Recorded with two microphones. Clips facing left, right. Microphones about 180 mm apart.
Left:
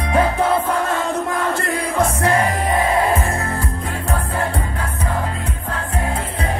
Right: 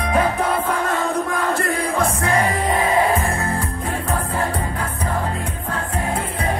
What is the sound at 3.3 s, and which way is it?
Music, 30° right (ahead or behind).